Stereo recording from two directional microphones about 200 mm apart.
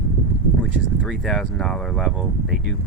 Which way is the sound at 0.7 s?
Centre (ahead or behind).